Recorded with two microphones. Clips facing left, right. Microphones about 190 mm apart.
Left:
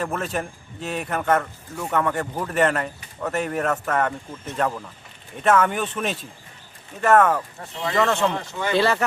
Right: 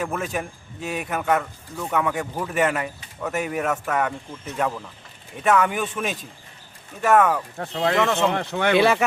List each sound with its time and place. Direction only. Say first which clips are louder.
0.0 s a man's voice: even; 5° right (ahead or behind)
7.6 s speech: right 6 dB; 65° right (ahead or behind)
7.9 s a man's voice: left 2 dB; centre (ahead or behind)
8.3 s speech: right 4 dB; 70° right (ahead or behind)